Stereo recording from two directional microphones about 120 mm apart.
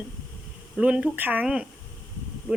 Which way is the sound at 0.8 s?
10° right (ahead or behind).